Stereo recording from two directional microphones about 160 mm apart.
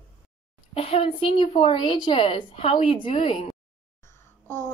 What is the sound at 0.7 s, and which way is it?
A woman's voice, 35° left (ahead or behind).